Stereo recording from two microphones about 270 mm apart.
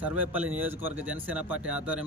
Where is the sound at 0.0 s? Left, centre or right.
Centre.